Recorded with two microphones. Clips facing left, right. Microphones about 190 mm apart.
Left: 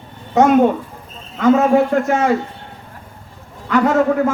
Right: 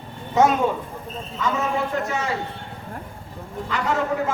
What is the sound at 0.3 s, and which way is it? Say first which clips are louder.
A man's voice: left 7 dB; 60° left (ahead or behind).